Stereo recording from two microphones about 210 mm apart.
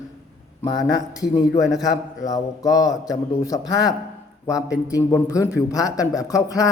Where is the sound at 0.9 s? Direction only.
15° left (ahead or behind).